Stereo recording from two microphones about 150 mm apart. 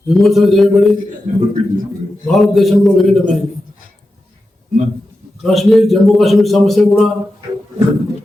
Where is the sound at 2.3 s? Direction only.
Centre (ahead or behind).